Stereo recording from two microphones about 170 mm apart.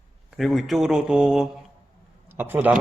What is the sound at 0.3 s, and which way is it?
A man's voice, centre (ahead or behind).